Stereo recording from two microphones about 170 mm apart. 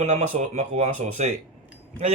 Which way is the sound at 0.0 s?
45° right (ahead or behind).